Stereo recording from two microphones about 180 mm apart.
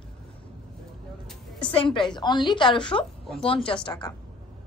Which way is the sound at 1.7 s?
30° left (ahead or behind).